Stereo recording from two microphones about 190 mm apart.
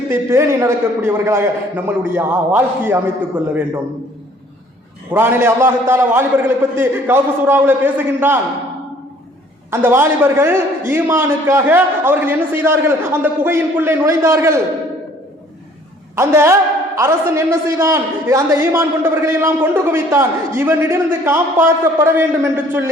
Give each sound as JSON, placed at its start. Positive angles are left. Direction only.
{"t": 0.1, "sound": "a man's voice", "side_deg": -15}
{"t": 5.1, "sound": "a man's voice", "side_deg": -10}
{"t": 9.6, "sound": "a man's voice", "side_deg": -10}
{"t": 16.1, "sound": "a man's voice", "side_deg": -15}